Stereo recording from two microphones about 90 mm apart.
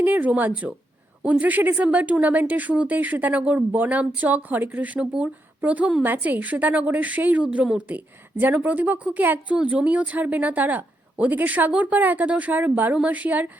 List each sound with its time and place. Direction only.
0.0 s a woman's voice: 20° right (ahead or behind)